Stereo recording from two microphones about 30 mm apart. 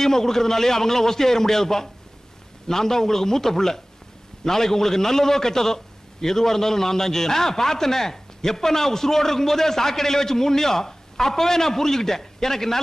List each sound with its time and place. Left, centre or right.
0.0 s a man's voice: centre